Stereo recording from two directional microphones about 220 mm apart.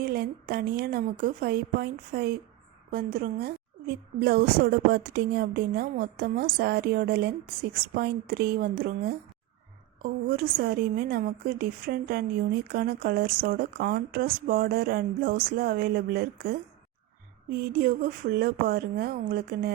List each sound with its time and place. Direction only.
0.0 s a woman's voice: 45° right (ahead or behind)
17.6 s a woman's voice: 40° right (ahead or behind)